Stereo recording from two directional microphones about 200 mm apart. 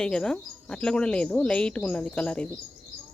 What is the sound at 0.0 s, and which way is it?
Speech, 5° left (ahead or behind).